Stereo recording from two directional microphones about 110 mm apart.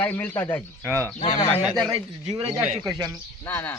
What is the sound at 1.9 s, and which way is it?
Speech, 60° right (ahead or behind).